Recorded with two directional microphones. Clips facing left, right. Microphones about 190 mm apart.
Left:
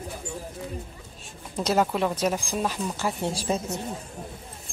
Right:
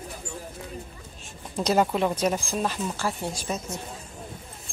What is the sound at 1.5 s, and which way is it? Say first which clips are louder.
Speech: right 1 dB; 5° left (ahead or behind).